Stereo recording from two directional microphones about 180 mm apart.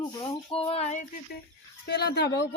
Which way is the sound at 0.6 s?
35° left (ahead or behind).